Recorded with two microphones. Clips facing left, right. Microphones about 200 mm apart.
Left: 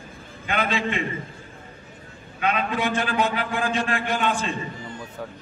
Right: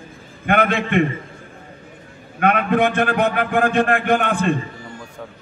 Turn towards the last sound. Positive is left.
turn(degrees=-60)  # may be behind; listen again after turning